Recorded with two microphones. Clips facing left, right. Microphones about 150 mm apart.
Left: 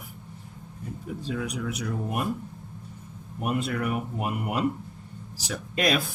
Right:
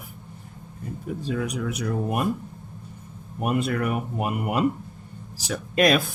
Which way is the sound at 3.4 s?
55° right (ahead or behind).